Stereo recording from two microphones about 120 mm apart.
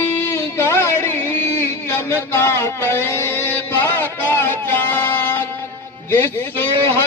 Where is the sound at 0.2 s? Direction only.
20° left (ahead or behind).